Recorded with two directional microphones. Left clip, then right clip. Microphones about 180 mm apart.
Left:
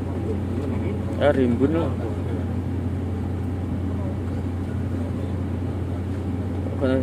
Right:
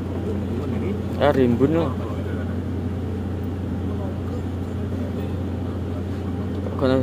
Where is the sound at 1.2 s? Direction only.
25° right (ahead or behind).